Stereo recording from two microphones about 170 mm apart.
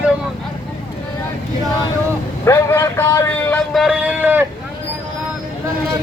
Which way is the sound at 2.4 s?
15° left (ahead or behind).